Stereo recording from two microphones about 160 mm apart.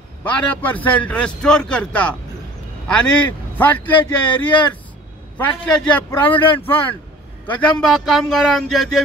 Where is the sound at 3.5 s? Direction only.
10° left (ahead or behind).